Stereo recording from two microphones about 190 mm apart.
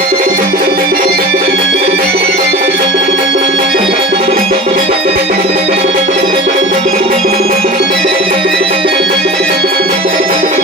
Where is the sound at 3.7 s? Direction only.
30° right (ahead or behind).